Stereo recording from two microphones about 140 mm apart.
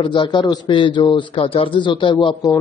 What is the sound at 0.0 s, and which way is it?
Speech, 35° left (ahead or behind).